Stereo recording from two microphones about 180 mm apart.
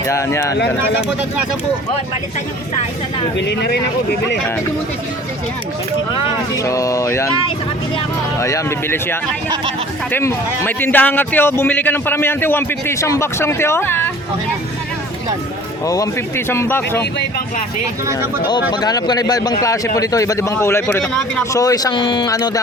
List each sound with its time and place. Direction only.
0.1 s a man's voice: 15° left (ahead or behind)
3.3 s speech: 70° left (ahead or behind)
6.6 s a man's voice: 20° left (ahead or behind)
8.4 s a man's voice: 15° left (ahead or behind)
16.5 s a man's voice: 10° left (ahead or behind)
18.7 s a man's voice: 20° left (ahead or behind)